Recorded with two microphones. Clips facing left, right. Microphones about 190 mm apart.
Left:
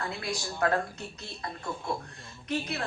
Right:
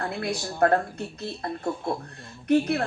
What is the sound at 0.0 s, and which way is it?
Speech, 55° right (ahead or behind).